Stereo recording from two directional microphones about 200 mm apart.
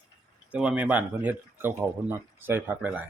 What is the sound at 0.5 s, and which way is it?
Speech, 5° right (ahead or behind).